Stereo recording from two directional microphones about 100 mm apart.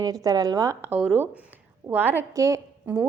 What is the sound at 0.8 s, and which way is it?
Speech, 20° right (ahead or behind).